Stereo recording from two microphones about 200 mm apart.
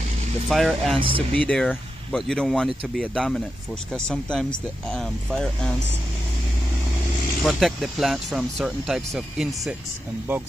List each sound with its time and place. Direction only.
0.5 s speech: centre (ahead or behind)
0.9 s speech: 25° right (ahead or behind)
1.4 s speech: 5° left (ahead or behind)
7.4 s speech: centre (ahead or behind)